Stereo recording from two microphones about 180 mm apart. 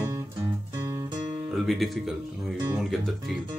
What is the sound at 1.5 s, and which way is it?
Speech, centre (ahead or behind).